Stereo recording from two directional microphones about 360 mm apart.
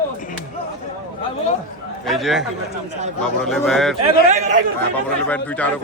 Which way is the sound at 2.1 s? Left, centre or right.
Centre.